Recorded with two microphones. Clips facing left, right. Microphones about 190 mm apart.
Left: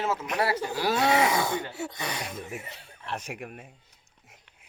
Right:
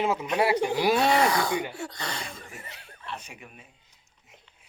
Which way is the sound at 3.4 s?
55° left (ahead or behind).